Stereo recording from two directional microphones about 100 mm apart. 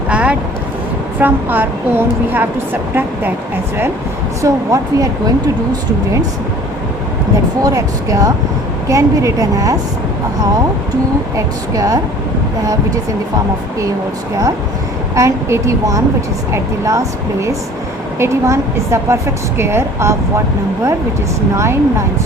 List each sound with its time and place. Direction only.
0.1 s vehicle: 10° right (ahead or behind)
1.2 s a woman's voice: 20° right (ahead or behind)
4.4 s a woman's voice: 35° right (ahead or behind)
7.6 s a woman's voice: 35° right (ahead or behind)
11.3 s a woman's voice: 35° right (ahead or behind)
15.1 s a woman's voice: 30° right (ahead or behind)
21.5 s a woman's voice: 30° right (ahead or behind)